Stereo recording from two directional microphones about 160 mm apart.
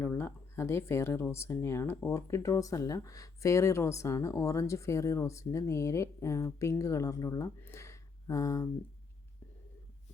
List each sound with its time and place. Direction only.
0.0 s speech: 15° left (ahead or behind)